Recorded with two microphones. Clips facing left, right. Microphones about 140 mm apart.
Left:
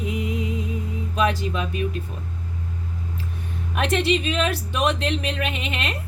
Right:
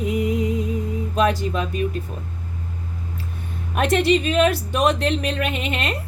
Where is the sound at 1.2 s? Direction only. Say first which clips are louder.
Right 3 dB; 45° right (ahead or behind).